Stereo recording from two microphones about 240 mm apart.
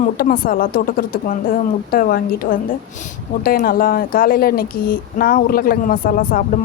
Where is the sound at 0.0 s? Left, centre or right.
Left.